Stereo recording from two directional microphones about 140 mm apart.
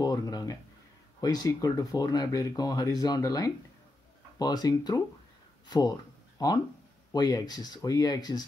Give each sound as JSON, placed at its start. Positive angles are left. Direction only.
{"t": 0.0, "sound": "speech", "side_deg": 30}